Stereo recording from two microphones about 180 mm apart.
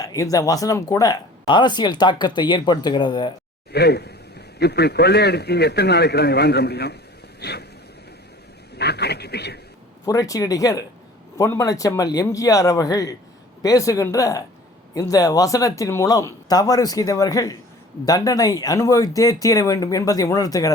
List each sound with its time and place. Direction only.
0.0 s speech: 20° left (ahead or behind)
3.7 s a man's voice: 65° left (ahead or behind)
7.3 s vehicle: 65° left (ahead or behind)
8.8 s a man's voice: 65° left (ahead or behind)
10.1 s speech: 20° left (ahead or behind)